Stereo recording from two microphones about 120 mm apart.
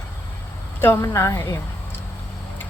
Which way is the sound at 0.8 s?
20° left (ahead or behind).